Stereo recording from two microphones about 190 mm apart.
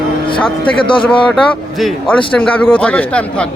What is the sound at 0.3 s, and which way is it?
Speech, 25° left (ahead or behind).